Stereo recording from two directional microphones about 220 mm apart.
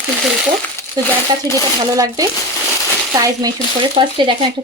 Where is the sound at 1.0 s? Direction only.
15° right (ahead or behind).